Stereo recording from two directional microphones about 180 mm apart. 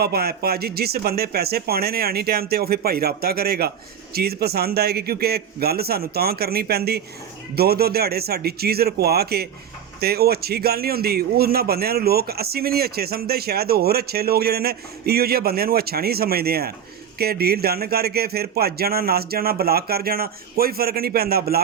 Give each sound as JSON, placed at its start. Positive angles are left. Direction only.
{"t": 0.0, "sound": "a man's voice", "side_deg": -60}